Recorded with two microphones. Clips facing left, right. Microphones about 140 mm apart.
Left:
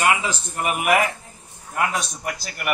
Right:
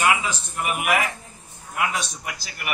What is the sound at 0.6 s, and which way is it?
A man's voice, 40° left (ahead or behind).